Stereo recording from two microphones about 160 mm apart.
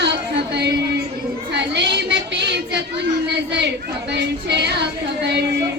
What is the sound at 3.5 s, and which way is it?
Speech, 90° right.